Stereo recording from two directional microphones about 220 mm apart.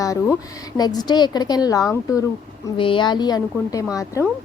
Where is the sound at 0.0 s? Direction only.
15° left (ahead or behind).